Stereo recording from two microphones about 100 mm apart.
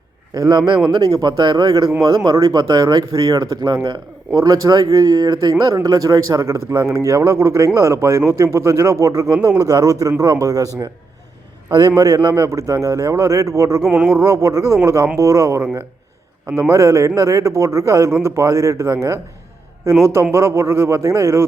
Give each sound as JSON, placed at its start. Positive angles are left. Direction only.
{"t": 0.3, "sound": "a man's voice", "side_deg": -40}
{"t": 13.8, "sound": "a sound", "side_deg": -10}
{"t": 14.1, "sound": "a man's voice", "side_deg": -30}